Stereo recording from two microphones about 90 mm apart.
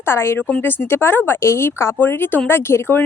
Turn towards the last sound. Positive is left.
turn(degrees=25)  # may be behind; listen again after turning